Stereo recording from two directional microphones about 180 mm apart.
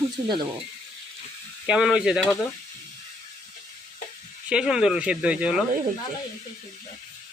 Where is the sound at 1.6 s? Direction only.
5° right (ahead or behind).